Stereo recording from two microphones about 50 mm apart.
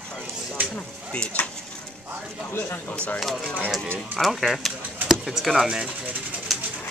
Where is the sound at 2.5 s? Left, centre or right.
Left.